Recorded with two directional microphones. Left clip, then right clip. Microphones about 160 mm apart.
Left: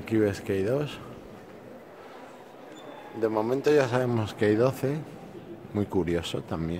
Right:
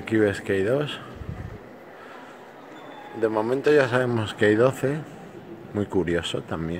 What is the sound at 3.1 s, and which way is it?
A man's voice, centre (ahead or behind).